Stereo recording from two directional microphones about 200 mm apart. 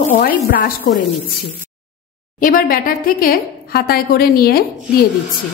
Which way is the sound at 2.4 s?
45° left (ahead or behind).